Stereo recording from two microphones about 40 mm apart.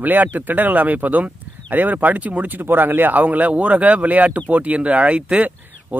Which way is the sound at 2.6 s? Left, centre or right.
Right.